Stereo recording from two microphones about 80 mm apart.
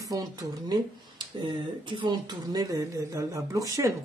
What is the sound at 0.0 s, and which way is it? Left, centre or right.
Speech, right.